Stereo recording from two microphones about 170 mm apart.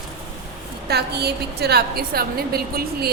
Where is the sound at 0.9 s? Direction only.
70° right (ahead or behind).